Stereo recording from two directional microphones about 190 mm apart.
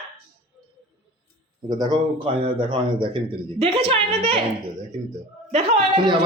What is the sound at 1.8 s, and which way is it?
A man's voice, 25° right (ahead or behind).